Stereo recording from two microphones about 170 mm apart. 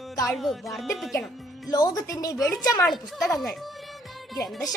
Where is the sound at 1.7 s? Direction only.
20° left (ahead or behind).